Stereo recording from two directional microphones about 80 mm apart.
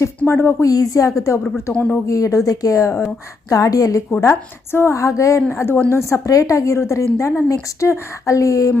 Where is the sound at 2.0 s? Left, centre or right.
Left.